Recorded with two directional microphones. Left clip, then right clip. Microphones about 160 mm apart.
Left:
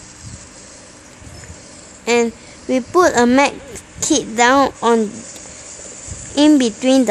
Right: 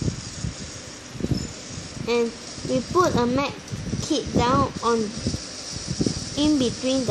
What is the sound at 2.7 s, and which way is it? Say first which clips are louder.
A child's voice: left 7 dB; 60° left (ahead or behind).